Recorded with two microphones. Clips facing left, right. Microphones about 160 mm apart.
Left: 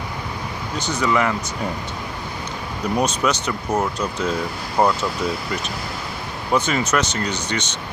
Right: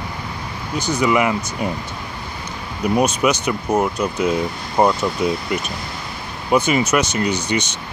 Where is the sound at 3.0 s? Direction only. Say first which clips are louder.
Right 3 dB; 10° right (ahead or behind).